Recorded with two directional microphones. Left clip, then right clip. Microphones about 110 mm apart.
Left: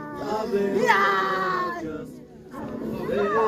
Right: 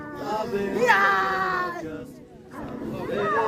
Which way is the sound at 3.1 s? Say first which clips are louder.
Left 1 dB; centre (ahead or behind).